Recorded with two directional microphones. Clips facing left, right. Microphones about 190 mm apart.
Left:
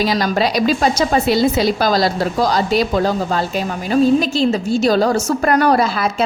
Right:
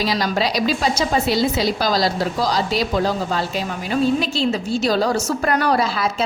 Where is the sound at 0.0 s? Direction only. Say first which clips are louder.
Left 4 dB; 50° left (ahead or behind).